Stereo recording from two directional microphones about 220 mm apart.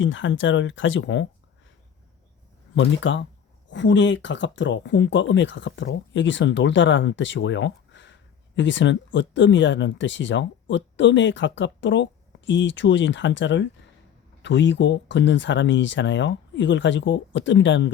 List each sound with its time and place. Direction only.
0.0 s speech: 60° left (ahead or behind)
2.7 s speech: 55° left (ahead or behind)